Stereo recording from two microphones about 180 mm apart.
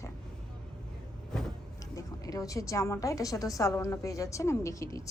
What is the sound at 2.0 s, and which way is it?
A woman's voice, 20° left (ahead or behind).